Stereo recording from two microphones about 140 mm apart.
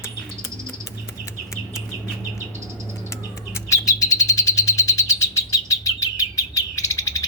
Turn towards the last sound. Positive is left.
turn(degrees=20)  # may be behind; listen again after turning